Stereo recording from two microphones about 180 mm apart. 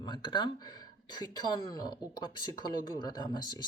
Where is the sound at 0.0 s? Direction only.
25° left (ahead or behind).